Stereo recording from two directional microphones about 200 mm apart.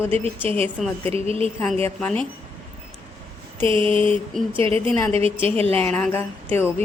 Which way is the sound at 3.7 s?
25° right (ahead or behind).